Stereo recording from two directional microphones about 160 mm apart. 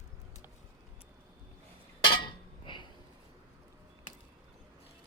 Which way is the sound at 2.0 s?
30° left (ahead or behind).